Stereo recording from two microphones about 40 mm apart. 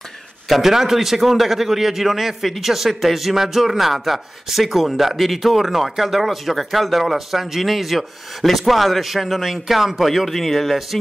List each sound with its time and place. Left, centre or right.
0.5 s a man's voice: centre